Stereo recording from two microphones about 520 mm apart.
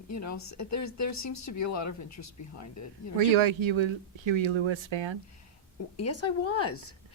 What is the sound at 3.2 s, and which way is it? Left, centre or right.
Speech, right.